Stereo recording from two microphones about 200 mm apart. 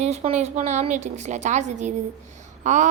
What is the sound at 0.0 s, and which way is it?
A woman's voice, 30° right (ahead or behind).